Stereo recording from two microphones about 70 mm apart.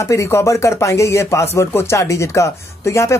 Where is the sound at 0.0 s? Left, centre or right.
Left.